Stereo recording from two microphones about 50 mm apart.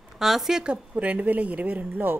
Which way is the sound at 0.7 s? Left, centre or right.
Right.